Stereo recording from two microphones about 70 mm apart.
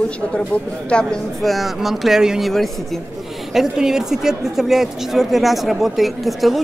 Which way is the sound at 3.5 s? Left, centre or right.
Centre.